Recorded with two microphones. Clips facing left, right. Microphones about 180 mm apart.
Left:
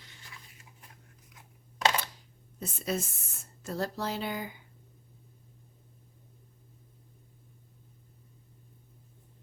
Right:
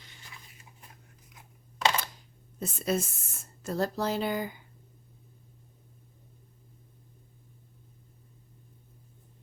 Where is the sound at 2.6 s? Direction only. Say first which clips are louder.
Right 4 dB; 45° right (ahead or behind).